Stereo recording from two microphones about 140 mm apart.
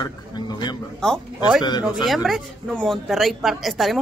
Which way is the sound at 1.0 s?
5° left (ahead or behind).